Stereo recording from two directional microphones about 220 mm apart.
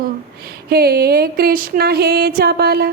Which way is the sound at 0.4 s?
45° right (ahead or behind).